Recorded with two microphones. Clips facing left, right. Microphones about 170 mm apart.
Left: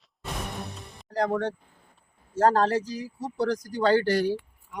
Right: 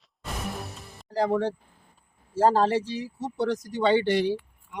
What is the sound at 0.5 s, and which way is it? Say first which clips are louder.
Music: even; centre (ahead or behind).